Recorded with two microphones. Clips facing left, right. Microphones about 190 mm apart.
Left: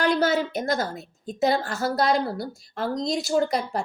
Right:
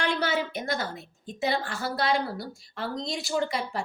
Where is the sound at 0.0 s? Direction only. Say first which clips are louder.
Left 6 dB; 40° left (ahead or behind).